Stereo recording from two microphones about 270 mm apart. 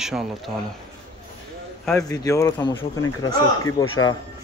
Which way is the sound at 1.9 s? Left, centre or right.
Centre.